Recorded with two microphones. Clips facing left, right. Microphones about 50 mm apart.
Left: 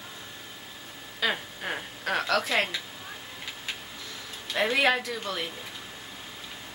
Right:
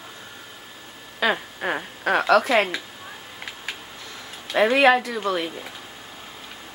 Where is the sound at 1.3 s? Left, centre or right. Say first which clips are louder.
Right 8 dB; right.